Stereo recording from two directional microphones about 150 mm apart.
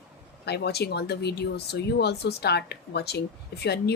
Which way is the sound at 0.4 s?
90° left.